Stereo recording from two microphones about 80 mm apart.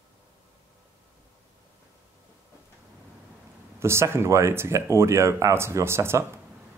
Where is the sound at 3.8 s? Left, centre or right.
Right.